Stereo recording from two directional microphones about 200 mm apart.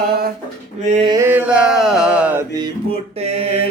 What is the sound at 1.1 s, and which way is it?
Mantra, 10° right (ahead or behind).